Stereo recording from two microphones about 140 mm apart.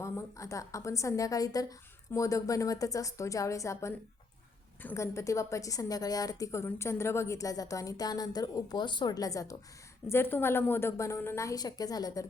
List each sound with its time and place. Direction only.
0.0 s a woman's voice: 20° left (ahead or behind)